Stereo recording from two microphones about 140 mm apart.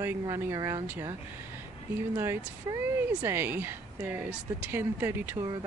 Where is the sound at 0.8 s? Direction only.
15° right (ahead or behind).